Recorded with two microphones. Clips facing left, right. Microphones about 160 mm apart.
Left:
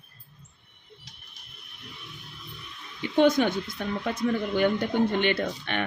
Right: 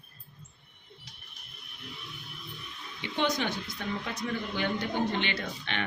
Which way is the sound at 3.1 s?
50° left (ahead or behind).